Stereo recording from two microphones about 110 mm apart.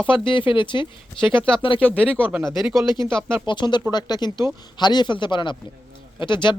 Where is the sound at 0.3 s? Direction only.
50° left (ahead or behind).